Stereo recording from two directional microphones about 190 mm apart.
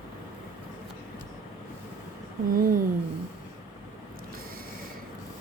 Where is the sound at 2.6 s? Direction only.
45° right (ahead or behind).